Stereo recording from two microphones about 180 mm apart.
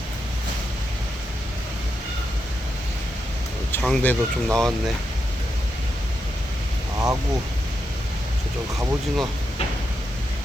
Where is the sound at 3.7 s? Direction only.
5° left (ahead or behind).